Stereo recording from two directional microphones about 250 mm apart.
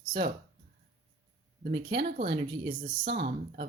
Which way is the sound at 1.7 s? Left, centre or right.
Right.